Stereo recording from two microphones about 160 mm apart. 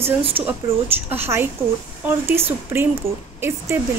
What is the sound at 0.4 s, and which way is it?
Speech, 35° right (ahead or behind).